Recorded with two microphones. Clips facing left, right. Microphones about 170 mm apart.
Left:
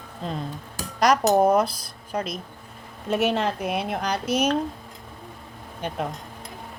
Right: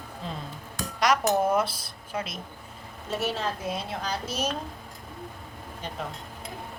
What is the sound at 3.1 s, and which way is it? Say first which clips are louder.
A woman's voice: left 7 dB; 65° left (ahead or behind).